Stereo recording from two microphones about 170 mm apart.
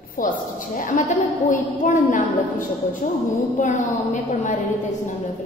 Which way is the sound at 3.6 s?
45° left (ahead or behind).